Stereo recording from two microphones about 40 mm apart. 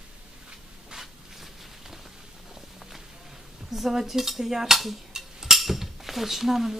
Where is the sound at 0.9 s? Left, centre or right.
Centre.